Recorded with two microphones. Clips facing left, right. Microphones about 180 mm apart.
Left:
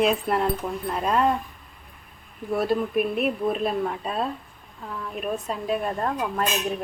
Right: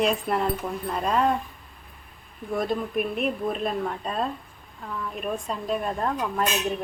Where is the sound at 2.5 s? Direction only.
5° left (ahead or behind).